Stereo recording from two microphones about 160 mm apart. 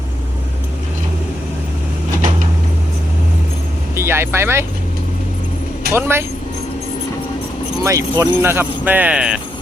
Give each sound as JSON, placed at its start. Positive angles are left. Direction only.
{"t": 3.9, "sound": "speech", "side_deg": -15}
{"t": 5.9, "sound": "speech", "side_deg": -15}
{"t": 7.9, "sound": "speech", "side_deg": -20}